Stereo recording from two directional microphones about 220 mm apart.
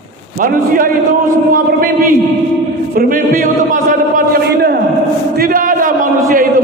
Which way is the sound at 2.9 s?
40° right (ahead or behind).